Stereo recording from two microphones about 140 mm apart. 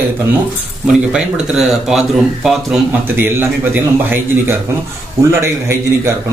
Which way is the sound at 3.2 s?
15° right (ahead or behind).